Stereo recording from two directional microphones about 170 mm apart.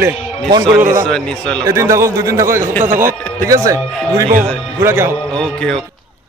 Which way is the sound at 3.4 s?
20° right (ahead or behind).